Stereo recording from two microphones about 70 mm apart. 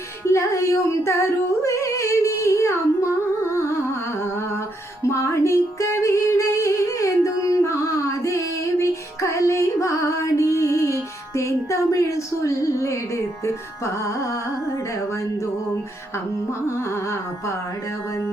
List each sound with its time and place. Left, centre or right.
0.3 s music: left
1.6 s humming: left
3.5 s music: left
4.2 s a sound: left
5.0 s music: left
16.6 s carnatic music: left